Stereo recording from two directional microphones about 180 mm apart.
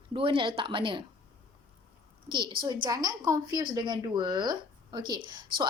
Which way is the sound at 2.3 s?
25° right (ahead or behind).